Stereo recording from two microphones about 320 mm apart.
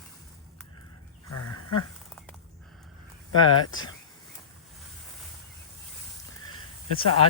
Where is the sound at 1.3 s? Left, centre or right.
Left.